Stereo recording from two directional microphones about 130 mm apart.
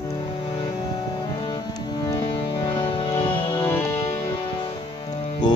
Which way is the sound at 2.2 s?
45° left (ahead or behind).